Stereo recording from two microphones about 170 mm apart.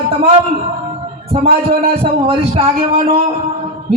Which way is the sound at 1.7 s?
35° right (ahead or behind).